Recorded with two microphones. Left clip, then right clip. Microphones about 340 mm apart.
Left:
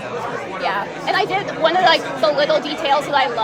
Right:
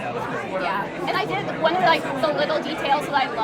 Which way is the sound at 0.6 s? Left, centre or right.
Left.